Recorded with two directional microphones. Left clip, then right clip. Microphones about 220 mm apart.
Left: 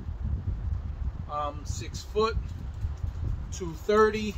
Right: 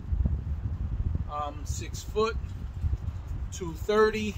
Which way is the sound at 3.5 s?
5° right (ahead or behind).